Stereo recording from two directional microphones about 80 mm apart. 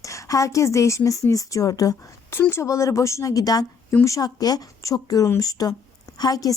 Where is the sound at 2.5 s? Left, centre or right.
Left.